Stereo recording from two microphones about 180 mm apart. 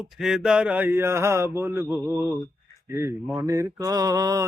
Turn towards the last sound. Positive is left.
turn(degrees=-20)  # may be behind; listen again after turning